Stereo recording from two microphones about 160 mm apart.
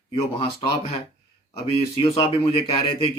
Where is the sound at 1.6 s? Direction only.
35° left (ahead or behind).